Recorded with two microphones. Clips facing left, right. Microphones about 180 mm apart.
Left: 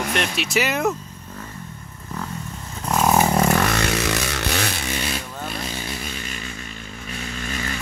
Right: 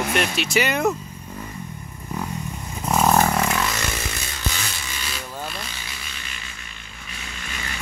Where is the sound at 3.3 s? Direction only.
35° left (ahead or behind).